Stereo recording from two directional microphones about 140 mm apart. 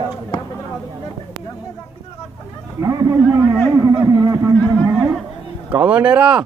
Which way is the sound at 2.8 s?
25° right (ahead or behind).